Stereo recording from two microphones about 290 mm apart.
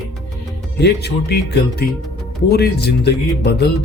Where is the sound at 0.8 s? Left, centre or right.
Left.